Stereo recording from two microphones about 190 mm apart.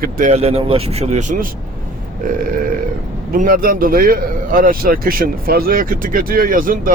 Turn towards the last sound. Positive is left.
turn(degrees=-45)  # may be behind; listen again after turning